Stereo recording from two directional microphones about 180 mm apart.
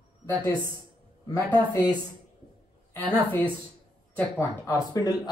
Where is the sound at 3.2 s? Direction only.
10° left (ahead or behind).